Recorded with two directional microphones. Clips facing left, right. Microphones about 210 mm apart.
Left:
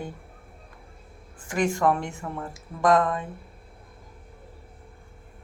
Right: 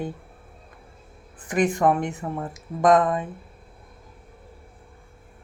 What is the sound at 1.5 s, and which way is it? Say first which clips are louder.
Speech: right 3 dB; 20° right (ahead or behind).